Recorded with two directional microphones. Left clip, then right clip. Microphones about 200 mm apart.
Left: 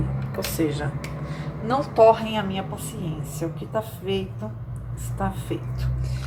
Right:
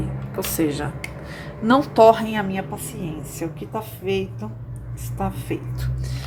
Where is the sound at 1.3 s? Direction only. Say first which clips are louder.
Right 7 dB; 30° right (ahead or behind).